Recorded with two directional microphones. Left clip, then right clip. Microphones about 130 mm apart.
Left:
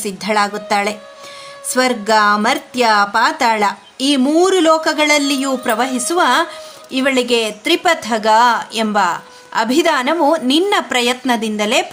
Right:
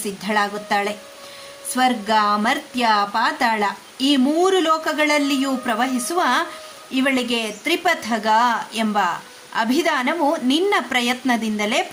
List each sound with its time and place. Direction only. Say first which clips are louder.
0.0 s a woman's voice: left 5 dB; 35° left (ahead or behind)